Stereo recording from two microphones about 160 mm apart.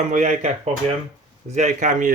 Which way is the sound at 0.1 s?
50° right (ahead or behind).